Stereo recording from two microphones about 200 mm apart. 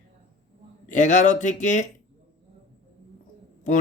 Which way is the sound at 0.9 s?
40° left (ahead or behind).